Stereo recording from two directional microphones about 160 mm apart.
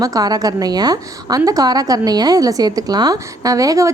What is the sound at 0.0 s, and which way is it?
A woman's voice, 25° right (ahead or behind).